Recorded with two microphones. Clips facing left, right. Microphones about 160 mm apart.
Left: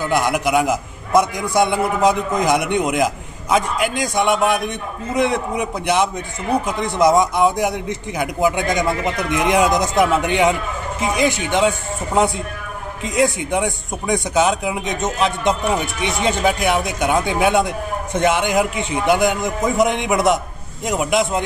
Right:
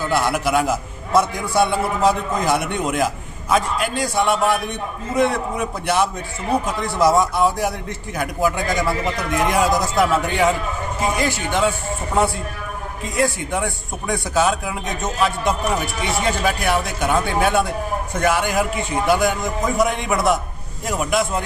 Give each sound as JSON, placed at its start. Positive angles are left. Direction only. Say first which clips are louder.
{"t": 0.1, "sound": "a man's voice", "louder": "left 1 dB", "side_deg": 15}